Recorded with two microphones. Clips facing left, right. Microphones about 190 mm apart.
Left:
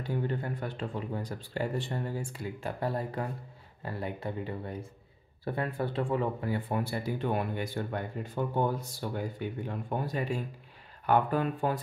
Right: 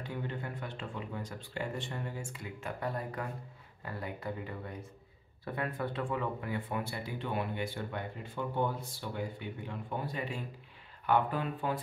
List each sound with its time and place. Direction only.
0.1 s speech: 40° left (ahead or behind)